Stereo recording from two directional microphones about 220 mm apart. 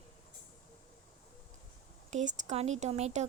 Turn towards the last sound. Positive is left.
turn(degrees=-30)  # may be behind; listen again after turning